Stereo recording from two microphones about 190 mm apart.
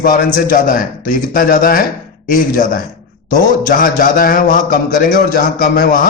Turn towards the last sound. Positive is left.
turn(degrees=45)  # may be behind; listen again after turning